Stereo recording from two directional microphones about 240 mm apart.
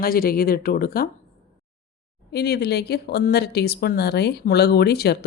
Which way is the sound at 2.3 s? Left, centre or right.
Left.